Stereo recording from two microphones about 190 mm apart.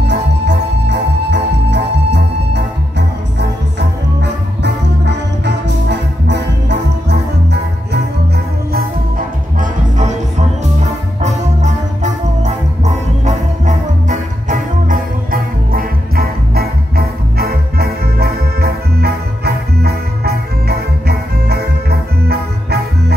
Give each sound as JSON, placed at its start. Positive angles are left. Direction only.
{"t": 0.0, "sound": "music", "side_deg": -65}
{"t": 9.6, "sound": "music", "side_deg": -40}